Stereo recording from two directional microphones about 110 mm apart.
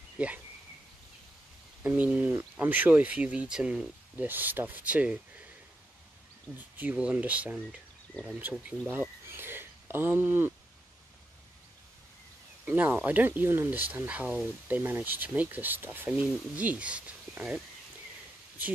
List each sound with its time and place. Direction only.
1.8 s speech: 10° right (ahead or behind)
6.5 s speech: 5° right (ahead or behind)
12.6 s speech: 15° right (ahead or behind)